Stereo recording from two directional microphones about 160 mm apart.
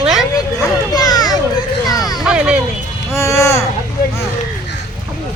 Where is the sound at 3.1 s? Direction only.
20° left (ahead or behind).